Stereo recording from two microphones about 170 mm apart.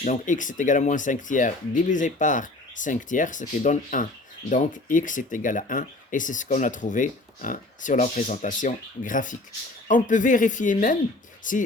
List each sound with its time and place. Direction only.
0.0 s speech: 45° left (ahead or behind)